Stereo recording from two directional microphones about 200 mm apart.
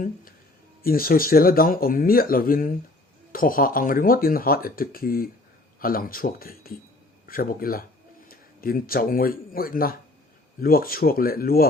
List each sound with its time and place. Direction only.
0.8 s speech: 45° left (ahead or behind)